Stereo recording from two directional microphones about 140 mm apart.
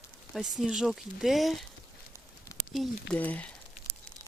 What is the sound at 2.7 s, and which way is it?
Speech, centre (ahead or behind).